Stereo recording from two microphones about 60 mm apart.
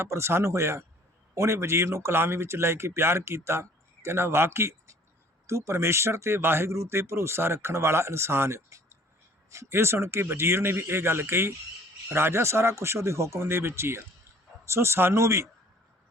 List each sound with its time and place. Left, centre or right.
0.0 s speech: right